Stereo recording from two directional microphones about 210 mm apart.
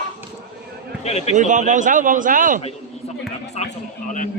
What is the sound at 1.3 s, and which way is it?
Speech, 35° right (ahead or behind).